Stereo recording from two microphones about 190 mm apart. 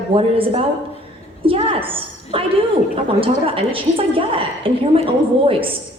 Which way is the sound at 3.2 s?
30° right (ahead or behind).